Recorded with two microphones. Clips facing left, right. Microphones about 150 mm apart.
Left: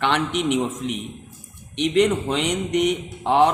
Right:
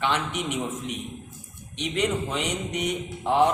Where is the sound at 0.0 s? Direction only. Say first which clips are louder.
Left 5 dB; 65° left (ahead or behind).